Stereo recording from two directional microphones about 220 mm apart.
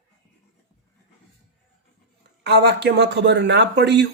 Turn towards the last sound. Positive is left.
turn(degrees=-50)  # may be behind; listen again after turning